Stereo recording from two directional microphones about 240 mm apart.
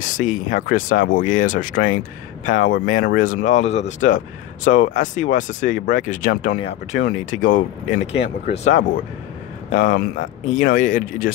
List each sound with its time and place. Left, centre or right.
0.0 s speech: left